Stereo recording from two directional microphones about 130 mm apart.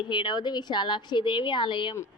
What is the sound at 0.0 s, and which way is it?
A woman's voice, 35° left (ahead or behind).